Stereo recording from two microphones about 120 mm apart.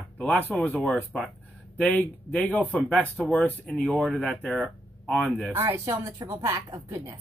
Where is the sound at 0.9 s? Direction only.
5° right (ahead or behind).